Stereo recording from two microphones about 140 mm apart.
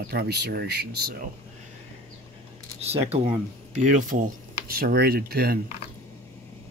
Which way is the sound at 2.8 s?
45° right (ahead or behind).